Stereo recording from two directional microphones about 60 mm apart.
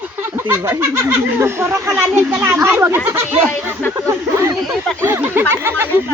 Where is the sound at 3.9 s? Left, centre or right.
Right.